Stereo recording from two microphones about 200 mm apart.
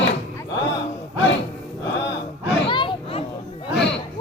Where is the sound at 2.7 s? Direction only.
25° left (ahead or behind).